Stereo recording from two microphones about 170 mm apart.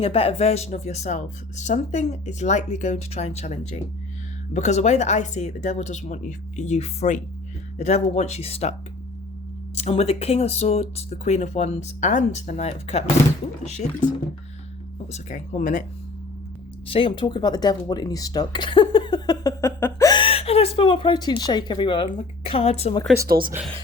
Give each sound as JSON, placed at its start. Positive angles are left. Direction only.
{"t": 0.0, "sound": "speech", "side_deg": 35}
{"t": 9.7, "sound": "speech", "side_deg": 40}
{"t": 15.1, "sound": "speech", "side_deg": 45}
{"t": 16.8, "sound": "speech", "side_deg": 30}